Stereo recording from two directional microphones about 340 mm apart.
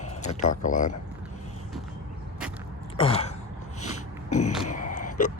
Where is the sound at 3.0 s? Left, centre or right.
Centre.